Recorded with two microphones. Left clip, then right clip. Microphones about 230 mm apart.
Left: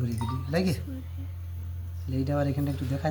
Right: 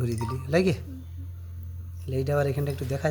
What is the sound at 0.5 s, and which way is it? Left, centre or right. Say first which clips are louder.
Speech: right 6 dB; right.